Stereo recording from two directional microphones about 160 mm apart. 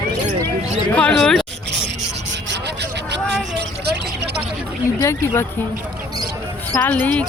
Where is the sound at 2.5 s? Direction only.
90° right.